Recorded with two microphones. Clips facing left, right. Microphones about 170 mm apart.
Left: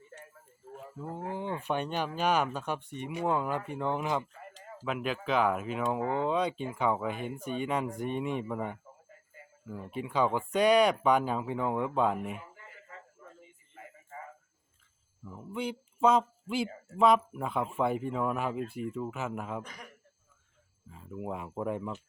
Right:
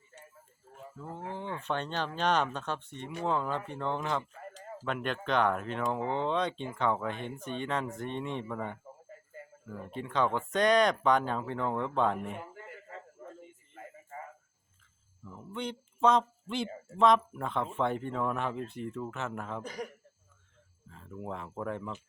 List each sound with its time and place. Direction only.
1.0 s speech: 10° left (ahead or behind)
13.2 s a sound: 55° right (ahead or behind)
15.2 s speech: 5° left (ahead or behind)
19.6 s a man's voice: 35° right (ahead or behind)
20.9 s speech: 10° left (ahead or behind)